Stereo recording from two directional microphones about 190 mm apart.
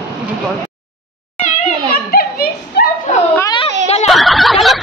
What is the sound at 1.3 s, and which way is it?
Children playing, 45° left (ahead or behind).